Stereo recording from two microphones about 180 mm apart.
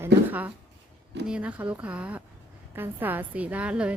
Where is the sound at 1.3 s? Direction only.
5° right (ahead or behind).